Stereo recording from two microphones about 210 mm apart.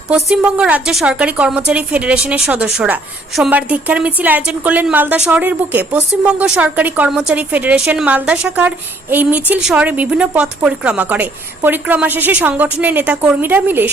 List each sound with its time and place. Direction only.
0.1 s a woman's voice: 5° right (ahead or behind)